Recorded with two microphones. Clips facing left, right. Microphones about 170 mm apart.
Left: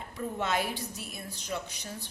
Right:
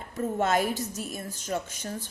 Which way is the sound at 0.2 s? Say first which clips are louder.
Right 6 dB; 45° right (ahead or behind).